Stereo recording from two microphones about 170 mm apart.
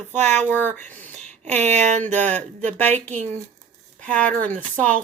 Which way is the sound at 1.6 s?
40° right (ahead or behind).